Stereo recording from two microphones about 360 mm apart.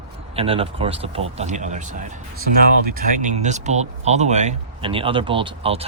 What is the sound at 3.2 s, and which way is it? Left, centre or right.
Speech, centre.